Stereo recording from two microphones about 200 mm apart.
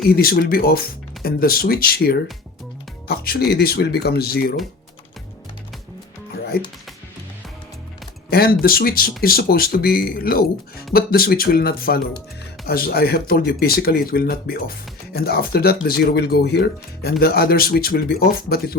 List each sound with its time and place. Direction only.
0.0 s speech: 50° left (ahead or behind)
8.3 s speech: 50° left (ahead or behind)